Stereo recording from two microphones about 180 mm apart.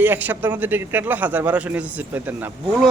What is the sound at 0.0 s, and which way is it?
A man's voice, 10° right (ahead or behind).